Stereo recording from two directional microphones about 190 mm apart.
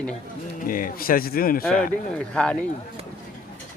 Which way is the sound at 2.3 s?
5° left (ahead or behind).